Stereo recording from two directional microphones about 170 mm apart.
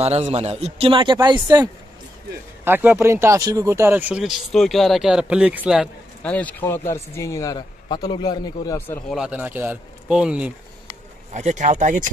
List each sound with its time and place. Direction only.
0.0 s speech: 40° right (ahead or behind)
2.6 s speech: 10° right (ahead or behind)
6.2 s speech: 10° left (ahead or behind)
9.1 s speech: 5° right (ahead or behind)
11.3 s speech: 45° right (ahead or behind)